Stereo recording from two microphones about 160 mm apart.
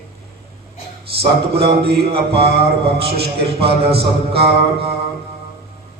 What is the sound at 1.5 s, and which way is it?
Speech, 90° right.